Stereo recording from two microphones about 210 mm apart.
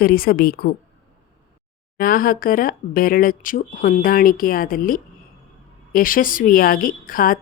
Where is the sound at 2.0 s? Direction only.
45° left (ahead or behind).